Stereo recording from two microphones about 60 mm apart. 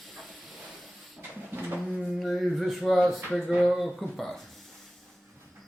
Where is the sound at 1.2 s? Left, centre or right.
Right.